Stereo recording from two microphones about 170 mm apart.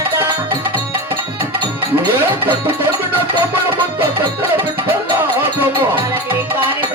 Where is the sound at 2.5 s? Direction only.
10° right (ahead or behind).